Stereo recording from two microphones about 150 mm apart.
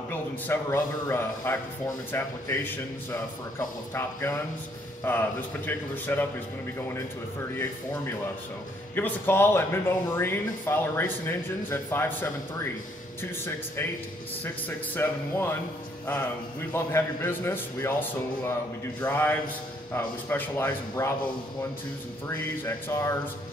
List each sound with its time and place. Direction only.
0.1 s speech: 15° left (ahead or behind)
8.9 s speech: 15° left (ahead or behind)
14.4 s speech: 15° left (ahead or behind)
16.7 s speech: 15° left (ahead or behind)
22.3 s speech: 15° left (ahead or behind)